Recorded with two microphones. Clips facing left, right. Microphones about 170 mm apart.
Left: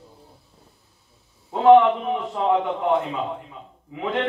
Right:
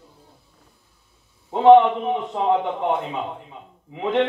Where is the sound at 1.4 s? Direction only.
20° right (ahead or behind).